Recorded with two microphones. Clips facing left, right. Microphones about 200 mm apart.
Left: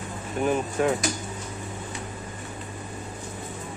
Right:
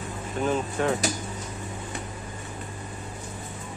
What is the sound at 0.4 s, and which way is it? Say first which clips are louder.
Speech: left 2 dB; 15° left (ahead or behind).